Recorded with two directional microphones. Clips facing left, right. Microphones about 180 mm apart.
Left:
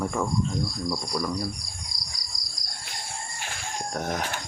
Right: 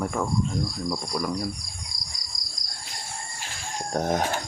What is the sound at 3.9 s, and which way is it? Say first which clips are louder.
Speech: right 6 dB; 30° right (ahead or behind).